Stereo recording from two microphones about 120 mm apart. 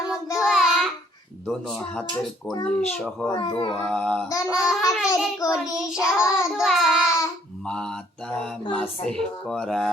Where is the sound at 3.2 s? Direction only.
40° left (ahead or behind).